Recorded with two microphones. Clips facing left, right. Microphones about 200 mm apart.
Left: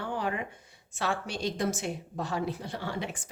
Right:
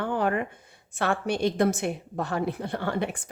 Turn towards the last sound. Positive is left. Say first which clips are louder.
# right 6 dB
turn(degrees=-55)  # may be behind; listen again after turning